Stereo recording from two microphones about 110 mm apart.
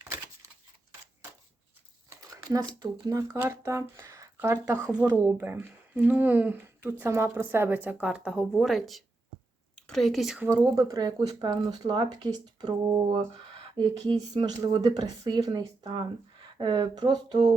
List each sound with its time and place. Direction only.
2.0 s speech: 30° right (ahead or behind)
3.4 s speech: 25° right (ahead or behind)
4.9 s a woman's voice: 10° right (ahead or behind)
10.6 s speech: 30° right (ahead or behind)
13.1 s speech: 50° right (ahead or behind)